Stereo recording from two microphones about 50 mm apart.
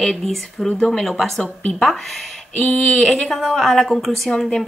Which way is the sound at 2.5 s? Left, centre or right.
Left.